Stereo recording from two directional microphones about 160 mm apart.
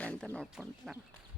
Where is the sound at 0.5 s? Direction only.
5° right (ahead or behind).